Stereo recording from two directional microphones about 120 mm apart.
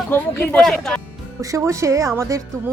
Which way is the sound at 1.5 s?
25° right (ahead or behind).